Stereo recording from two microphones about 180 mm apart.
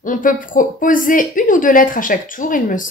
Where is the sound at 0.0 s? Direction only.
50° left (ahead or behind).